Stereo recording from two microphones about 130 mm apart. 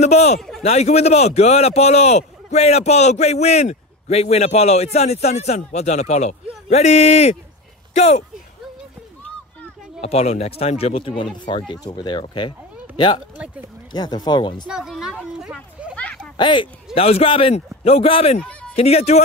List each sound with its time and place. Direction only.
0.0 s a man's voice: 60° left (ahead or behind)
10.0 s a man's voice: 55° left (ahead or behind); by 13.2 s 35° left (ahead or behind)
13.4 s speech: 10° right (ahead or behind)
13.9 s speech: 35° left (ahead or behind)
14.7 s speech: 5° right (ahead or behind)
16.0 s a sound: 10° left (ahead or behind)
16.3 s a man's voice: 40° left (ahead or behind)
18.4 s a sound: 5° left (ahead or behind)
18.8 s a man's voice: 50° left (ahead or behind)